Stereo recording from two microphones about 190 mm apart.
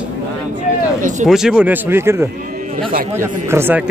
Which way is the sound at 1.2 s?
5° right (ahead or behind).